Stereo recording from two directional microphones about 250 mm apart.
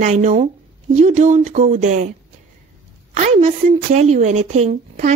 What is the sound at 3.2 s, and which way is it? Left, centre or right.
Speech, right.